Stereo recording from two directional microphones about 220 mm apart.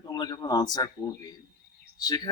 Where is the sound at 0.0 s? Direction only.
20° left (ahead or behind).